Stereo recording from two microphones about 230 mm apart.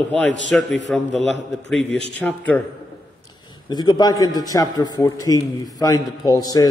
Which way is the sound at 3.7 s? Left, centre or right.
Centre.